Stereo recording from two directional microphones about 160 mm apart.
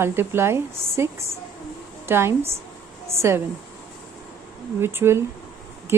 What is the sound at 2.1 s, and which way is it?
Speech, 15° right (ahead or behind).